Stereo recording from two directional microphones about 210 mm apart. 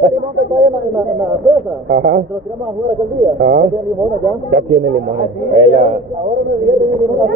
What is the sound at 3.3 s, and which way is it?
A man's voice, 40° right (ahead or behind).